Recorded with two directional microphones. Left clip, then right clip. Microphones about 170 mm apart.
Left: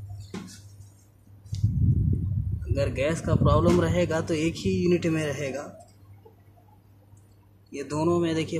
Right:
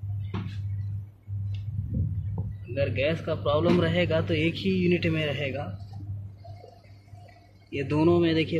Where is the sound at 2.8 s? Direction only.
25° left (ahead or behind).